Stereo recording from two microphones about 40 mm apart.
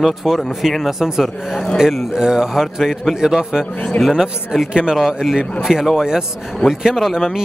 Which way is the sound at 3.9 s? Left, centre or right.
Left.